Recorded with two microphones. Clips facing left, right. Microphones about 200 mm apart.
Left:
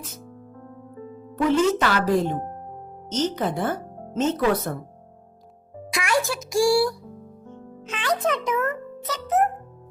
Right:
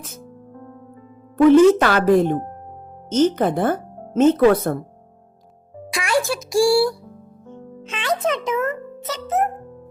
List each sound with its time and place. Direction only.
1.4 s speech: 55° right (ahead or behind)
3.1 s speech: 55° right (ahead or behind)
5.9 s a child's voice: 30° right (ahead or behind)